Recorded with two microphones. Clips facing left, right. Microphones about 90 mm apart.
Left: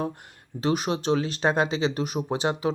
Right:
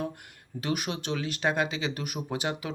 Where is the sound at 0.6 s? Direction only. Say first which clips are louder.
Left 7 dB; 30° left (ahead or behind).